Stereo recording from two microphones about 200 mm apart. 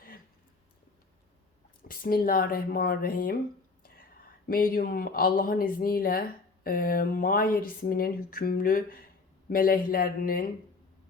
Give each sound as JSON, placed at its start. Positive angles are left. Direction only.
{"t": 1.9, "sound": "speech", "side_deg": 45}
{"t": 4.4, "sound": "speech", "side_deg": 45}